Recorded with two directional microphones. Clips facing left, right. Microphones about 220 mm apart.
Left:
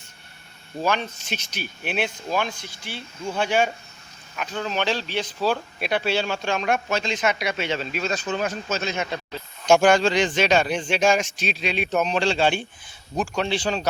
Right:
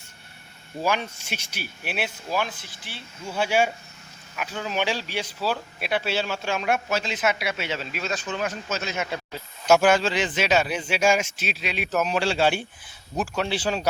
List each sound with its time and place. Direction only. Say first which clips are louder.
0.8 s speech: left 1 dB; 10° right (ahead or behind)
8.3 s a man's voice: left 3 dB; 30° left (ahead or behind)
8.8 s speech: left 2 dB; 5° right (ahead or behind)